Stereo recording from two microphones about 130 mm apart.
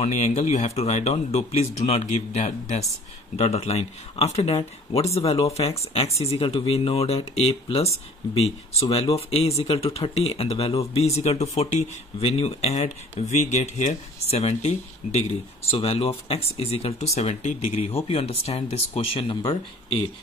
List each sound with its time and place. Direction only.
0.0 s speech: 60° left (ahead or behind); by 19.6 s 40° left (ahead or behind)